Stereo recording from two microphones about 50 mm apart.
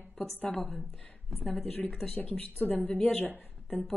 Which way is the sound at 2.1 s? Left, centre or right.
Left.